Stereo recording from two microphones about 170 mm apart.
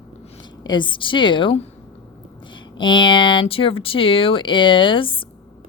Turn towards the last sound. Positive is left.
turn(degrees=30)  # may be behind; listen again after turning